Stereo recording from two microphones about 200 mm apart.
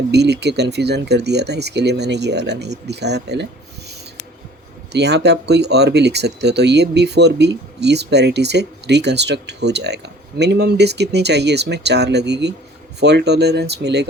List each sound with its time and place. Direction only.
0.1 s speech: 55° right (ahead or behind)
4.9 s speech: 55° right (ahead or behind)